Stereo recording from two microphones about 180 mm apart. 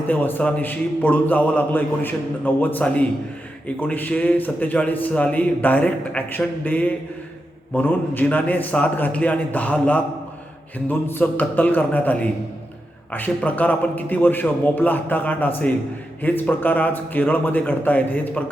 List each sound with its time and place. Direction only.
0.1 s a man's voice: 10° left (ahead or behind)